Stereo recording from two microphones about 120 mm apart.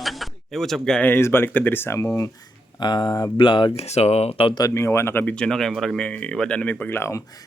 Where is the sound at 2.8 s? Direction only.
35° left (ahead or behind).